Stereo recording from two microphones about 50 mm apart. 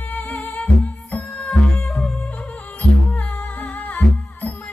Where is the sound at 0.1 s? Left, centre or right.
Left.